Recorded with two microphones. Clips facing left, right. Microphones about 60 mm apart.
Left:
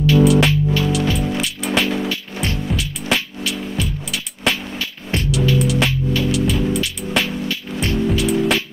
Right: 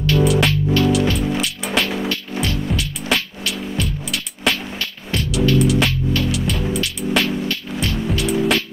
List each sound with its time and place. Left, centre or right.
0.0 s music: centre